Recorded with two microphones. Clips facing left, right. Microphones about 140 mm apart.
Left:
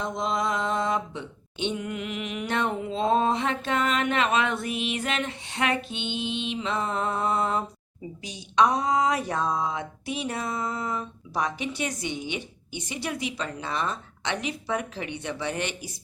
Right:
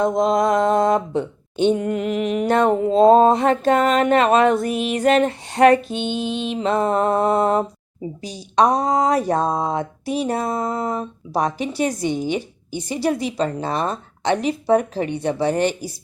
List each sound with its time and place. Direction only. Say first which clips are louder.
0.0 s mantra: right 10 dB; 45° right (ahead or behind)
8.2 s speech: right 5 dB; 35° right (ahead or behind)